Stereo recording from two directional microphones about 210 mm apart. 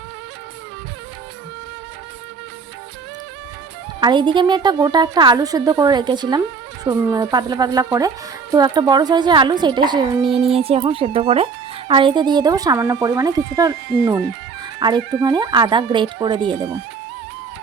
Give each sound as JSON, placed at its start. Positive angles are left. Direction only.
{"t": 4.0, "sound": "speech", "side_deg": -20}